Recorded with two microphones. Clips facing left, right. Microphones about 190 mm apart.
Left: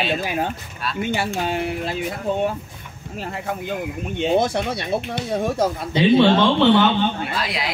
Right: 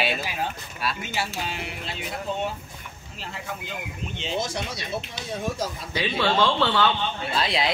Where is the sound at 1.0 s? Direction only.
55° left (ahead or behind).